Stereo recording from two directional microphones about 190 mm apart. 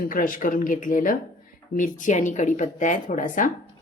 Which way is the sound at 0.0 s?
45° left (ahead or behind).